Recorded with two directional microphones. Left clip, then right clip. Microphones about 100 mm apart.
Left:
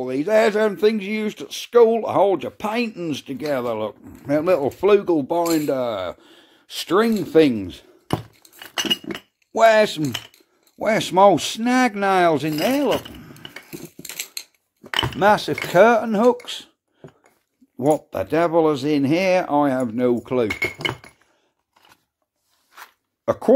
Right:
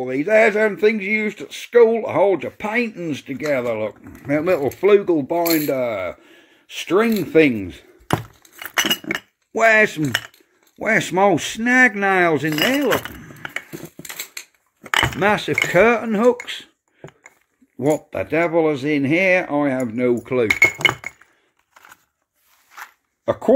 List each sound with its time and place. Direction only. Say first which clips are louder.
0.2 s speech: right 2 dB; 25° left (ahead or behind)
5.0 s speech: right 1 dB; 30° left (ahead or behind)
5.4 s speech: right 1 dB; 10° left (ahead or behind)
5.8 s speech: right 2 dB; 20° left (ahead or behind)
9.6 s speech: even; centre (ahead or behind)
11.8 s speech: right 6 dB; 20° left (ahead or behind)
12.1 s speech: even; 10° left (ahead or behind)
15.0 s speech: even; 10° left (ahead or behind)